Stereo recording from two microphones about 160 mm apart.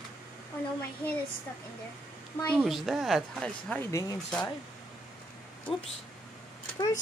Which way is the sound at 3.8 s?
20° left (ahead or behind).